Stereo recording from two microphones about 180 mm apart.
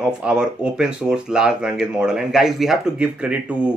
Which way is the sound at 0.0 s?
5° right (ahead or behind).